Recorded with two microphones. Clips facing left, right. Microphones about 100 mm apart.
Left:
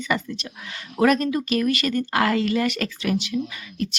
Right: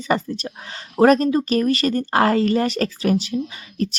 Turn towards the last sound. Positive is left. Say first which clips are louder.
# right 3 dB
turn(degrees=-35)  # may be behind; listen again after turning